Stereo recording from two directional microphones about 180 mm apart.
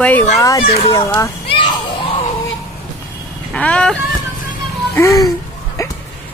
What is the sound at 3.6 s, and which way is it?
Speech, 5° left (ahead or behind).